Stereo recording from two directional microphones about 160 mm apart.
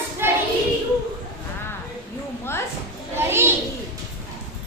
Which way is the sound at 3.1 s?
15° right (ahead or behind).